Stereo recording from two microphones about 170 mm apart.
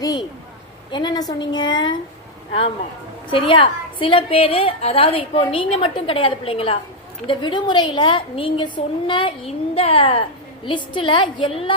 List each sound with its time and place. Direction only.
0.0 s a woman's voice: 20° left (ahead or behind)
3.2 s a woman's voice: 30° left (ahead or behind)